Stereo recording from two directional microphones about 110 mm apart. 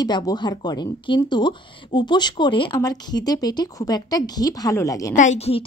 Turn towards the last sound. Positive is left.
turn(degrees=65)  # may be behind; listen again after turning